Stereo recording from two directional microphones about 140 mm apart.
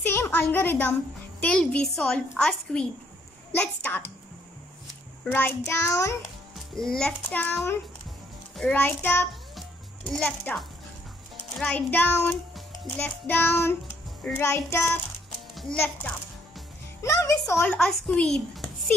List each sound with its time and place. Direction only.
0.0 s a child's voice: 15° left (ahead or behind)
5.2 s a woman's voice: 15° left (ahead or behind)
6.5 s a woman's voice: 5° left (ahead or behind)
9.6 s music: 5° left (ahead or behind)
11.6 s a woman's voice: 10° left (ahead or behind)
17.7 s a child's voice: 5° left (ahead or behind)